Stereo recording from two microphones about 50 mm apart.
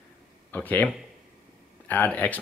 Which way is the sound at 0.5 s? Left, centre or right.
Left.